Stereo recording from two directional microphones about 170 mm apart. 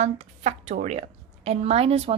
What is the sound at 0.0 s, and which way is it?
A woman's voice, 40° right (ahead or behind).